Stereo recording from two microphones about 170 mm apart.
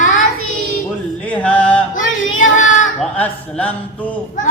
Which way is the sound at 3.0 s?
10° left (ahead or behind).